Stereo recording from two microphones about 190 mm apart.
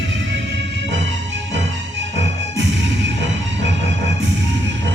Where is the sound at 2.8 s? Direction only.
70° right (ahead or behind).